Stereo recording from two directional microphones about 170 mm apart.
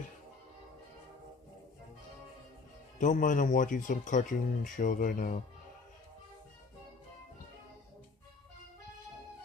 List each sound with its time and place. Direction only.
3.0 s speech: 50° left (ahead or behind)